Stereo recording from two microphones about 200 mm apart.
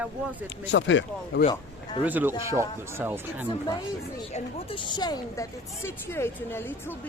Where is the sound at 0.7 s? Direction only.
65° left (ahead or behind).